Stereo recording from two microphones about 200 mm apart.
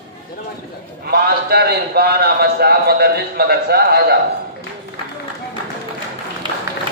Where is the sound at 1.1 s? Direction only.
55° right (ahead or behind).